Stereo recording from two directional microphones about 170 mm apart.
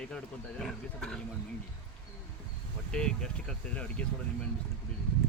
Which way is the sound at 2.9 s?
5° left (ahead or behind).